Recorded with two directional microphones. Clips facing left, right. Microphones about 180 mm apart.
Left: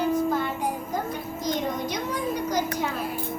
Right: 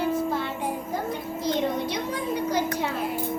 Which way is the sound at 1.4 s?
30° right (ahead or behind).